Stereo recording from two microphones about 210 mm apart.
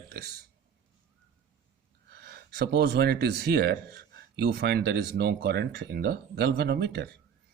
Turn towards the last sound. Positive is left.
turn(degrees=-50)  # may be behind; listen again after turning